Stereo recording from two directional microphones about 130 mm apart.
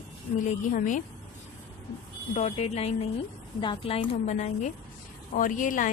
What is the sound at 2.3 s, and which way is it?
Speech, 55° left (ahead or behind).